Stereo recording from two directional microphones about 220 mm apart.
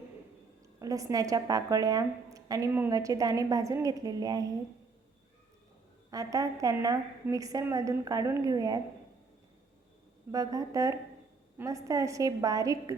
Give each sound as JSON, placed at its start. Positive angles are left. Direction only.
{"t": 0.8, "sound": "a woman's voice", "side_deg": -15}
{"t": 6.1, "sound": "a woman's voice", "side_deg": -15}
{"t": 10.3, "sound": "a woman's voice", "side_deg": -15}